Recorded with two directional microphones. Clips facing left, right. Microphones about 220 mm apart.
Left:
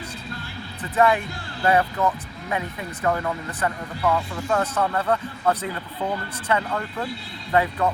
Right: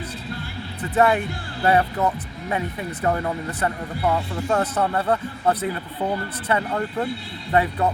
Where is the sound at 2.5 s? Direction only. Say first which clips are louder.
Right 2 dB; 25° right (ahead or behind).